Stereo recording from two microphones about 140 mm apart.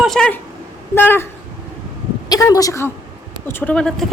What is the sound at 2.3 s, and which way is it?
A woman's voice, 25° left (ahead or behind).